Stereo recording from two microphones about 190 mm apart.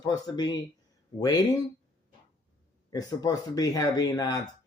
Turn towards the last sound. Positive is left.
turn(degrees=20)  # may be behind; listen again after turning